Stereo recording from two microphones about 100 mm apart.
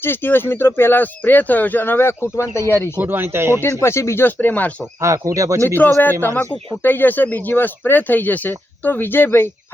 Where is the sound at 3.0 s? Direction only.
20° right (ahead or behind).